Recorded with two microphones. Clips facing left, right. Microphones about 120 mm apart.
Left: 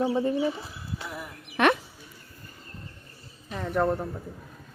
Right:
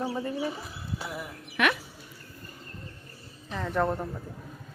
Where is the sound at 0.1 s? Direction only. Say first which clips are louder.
Left 7 dB; 25° left (ahead or behind).